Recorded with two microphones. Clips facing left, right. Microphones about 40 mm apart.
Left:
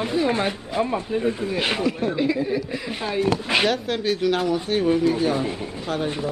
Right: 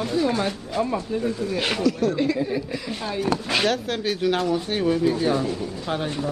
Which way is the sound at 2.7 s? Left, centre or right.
Left.